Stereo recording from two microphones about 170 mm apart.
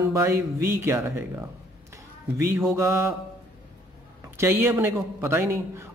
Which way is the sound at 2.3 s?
15° right (ahead or behind).